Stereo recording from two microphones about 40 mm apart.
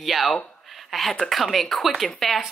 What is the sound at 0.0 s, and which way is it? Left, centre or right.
Speech, centre.